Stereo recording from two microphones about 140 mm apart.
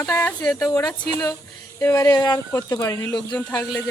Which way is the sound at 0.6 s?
20° left (ahead or behind).